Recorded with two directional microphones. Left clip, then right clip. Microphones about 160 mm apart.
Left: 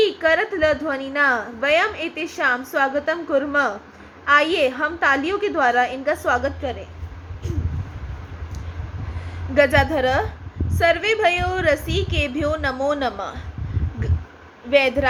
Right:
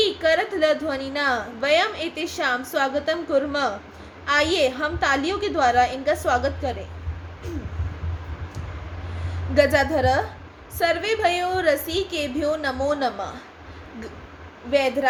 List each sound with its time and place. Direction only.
0.0 s a woman's voice: 20° left (ahead or behind)
9.6 s a woman's voice: 15° left (ahead or behind)
14.7 s a woman's voice: 20° left (ahead or behind)